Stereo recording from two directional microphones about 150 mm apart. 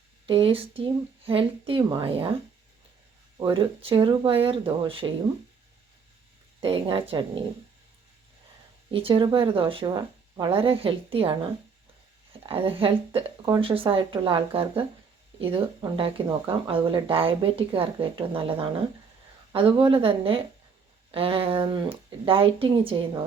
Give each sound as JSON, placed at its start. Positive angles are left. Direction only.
{"t": 0.3, "sound": "speech", "side_deg": -35}
{"t": 6.6, "sound": "speech", "side_deg": -35}
{"t": 8.9, "sound": "speech", "side_deg": -35}
{"t": 12.4, "sound": "speech", "side_deg": -35}